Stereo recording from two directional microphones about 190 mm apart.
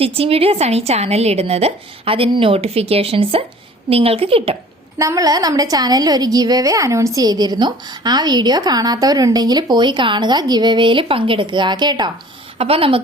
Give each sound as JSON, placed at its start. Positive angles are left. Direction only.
{"t": 0.0, "sound": "a woman's voice", "side_deg": -30}
{"t": 4.9, "sound": "a woman's voice", "side_deg": -15}